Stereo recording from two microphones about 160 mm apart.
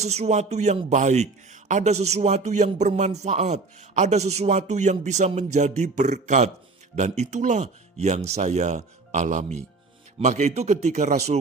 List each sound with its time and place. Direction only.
0.0 s speech: 45° right (ahead or behind)